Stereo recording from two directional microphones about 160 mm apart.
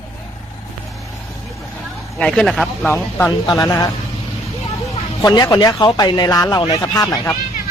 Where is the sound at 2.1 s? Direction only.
5° left (ahead or behind).